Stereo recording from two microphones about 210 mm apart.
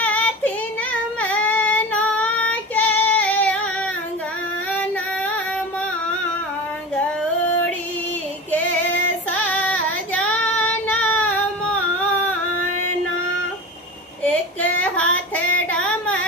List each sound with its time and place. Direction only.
0.0 s child singing: 5° left (ahead or behind)
6.9 s female singing: 5° left (ahead or behind)
9.3 s child singing: 5° left (ahead or behind)
12.5 s music: 90° left
14.3 s child singing: 5° left (ahead or behind)
15.7 s a sound: 5° left (ahead or behind)